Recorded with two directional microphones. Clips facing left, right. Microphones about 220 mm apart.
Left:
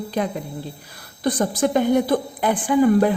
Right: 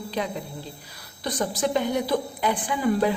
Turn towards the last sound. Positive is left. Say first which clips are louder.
# left 7 dB
turn(degrees=50)  # may be behind; listen again after turning